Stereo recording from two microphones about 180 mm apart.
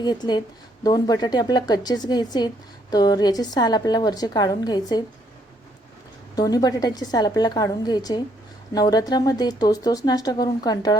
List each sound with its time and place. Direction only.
0.0 s a woman's voice: 25° left (ahead or behind)
6.3 s a woman's voice: 20° left (ahead or behind)